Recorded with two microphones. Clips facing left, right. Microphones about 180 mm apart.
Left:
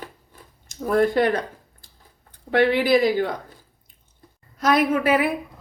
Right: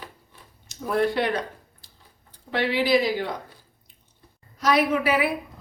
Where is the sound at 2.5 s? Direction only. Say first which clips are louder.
Left 4 dB; 55° left (ahead or behind).